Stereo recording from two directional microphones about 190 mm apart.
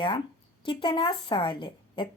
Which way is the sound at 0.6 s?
25° left (ahead or behind).